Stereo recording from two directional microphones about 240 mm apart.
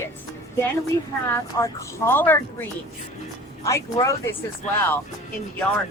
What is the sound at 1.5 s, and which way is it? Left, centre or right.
Speech, centre.